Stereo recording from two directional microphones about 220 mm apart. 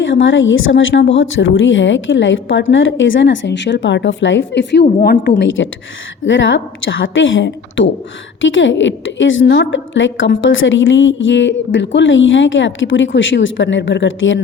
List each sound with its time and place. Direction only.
0.0 s a woman's voice: 60° left (ahead or behind)